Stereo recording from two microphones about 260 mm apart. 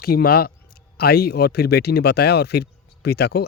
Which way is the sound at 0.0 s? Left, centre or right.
Left.